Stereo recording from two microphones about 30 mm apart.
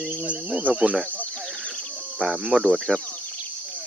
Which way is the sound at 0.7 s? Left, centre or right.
Right.